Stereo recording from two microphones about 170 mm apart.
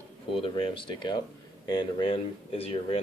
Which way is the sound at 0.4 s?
30° left (ahead or behind).